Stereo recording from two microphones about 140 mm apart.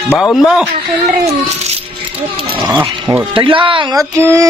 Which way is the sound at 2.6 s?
30° right (ahead or behind).